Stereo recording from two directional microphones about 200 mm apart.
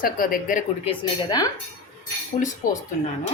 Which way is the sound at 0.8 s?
20° left (ahead or behind).